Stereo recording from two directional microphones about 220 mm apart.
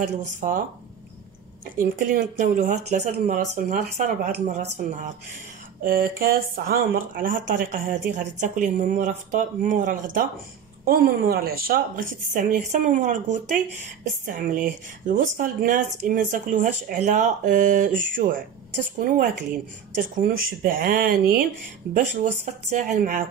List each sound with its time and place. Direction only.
0.0 s speech: 35° right (ahead or behind)
1.8 s speech: 35° right (ahead or behind)
20.6 s speech: 40° right (ahead or behind)